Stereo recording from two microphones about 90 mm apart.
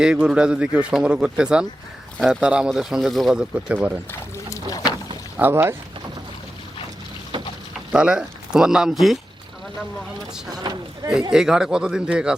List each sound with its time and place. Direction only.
0.0 s speech: 10° right (ahead or behind)
2.6 s speech: centre (ahead or behind)
4.1 s a sound: 35° left (ahead or behind)
5.4 s speech: 25° right (ahead or behind)
7.9 s speech: 10° right (ahead or behind)
10.5 s speech: 50° right (ahead or behind)
11.3 s speech: 5° right (ahead or behind)